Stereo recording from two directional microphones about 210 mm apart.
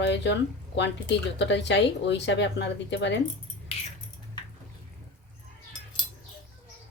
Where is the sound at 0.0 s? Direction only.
55° left (ahead or behind).